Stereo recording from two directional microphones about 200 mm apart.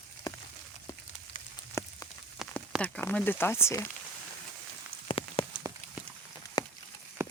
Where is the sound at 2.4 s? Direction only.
Centre (ahead or behind).